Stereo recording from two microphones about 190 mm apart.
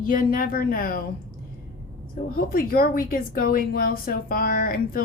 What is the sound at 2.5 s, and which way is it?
A woman's voice, 50° left (ahead or behind).